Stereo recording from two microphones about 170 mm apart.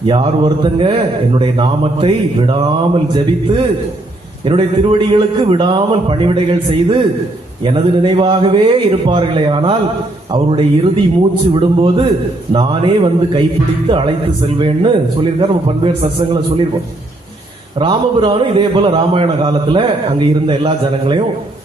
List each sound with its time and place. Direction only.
0.0 s a man's voice: 30° right (ahead or behind)
4.4 s a man's voice: 30° right (ahead or behind)
17.7 s a man's voice: 30° right (ahead or behind)